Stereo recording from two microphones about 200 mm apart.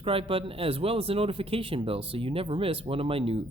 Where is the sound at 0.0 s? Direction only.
25° right (ahead or behind).